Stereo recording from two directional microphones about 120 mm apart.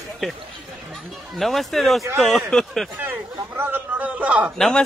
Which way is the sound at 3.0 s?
15° right (ahead or behind).